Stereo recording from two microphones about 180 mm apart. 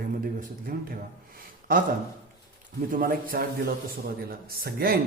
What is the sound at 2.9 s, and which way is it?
Speech, 50° right (ahead or behind).